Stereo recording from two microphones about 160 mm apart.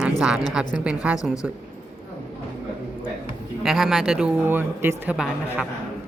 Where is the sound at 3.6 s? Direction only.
Centre (ahead or behind).